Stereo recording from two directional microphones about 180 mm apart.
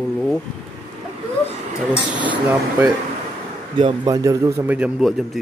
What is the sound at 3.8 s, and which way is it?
A man's voice, 25° right (ahead or behind).